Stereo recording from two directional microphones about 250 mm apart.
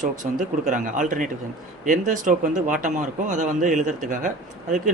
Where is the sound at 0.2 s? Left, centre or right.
Right.